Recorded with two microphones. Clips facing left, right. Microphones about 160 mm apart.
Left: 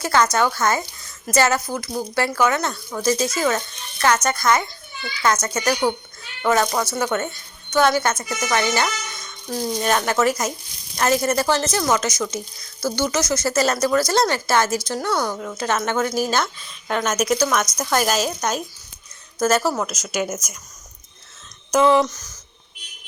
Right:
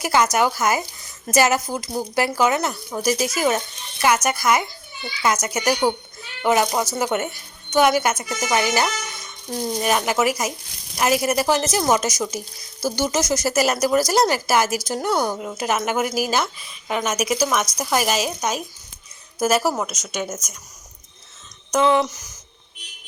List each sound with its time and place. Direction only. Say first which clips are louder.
0.0 s a woman's voice: even; 15° right (ahead or behind)
19.9 s a woman's voice: left 3 dB; 5° left (ahead or behind)
21.7 s a woman's voice: left 2 dB; centre (ahead or behind)
22.0 s speech: left 2 dB; 10° right (ahead or behind)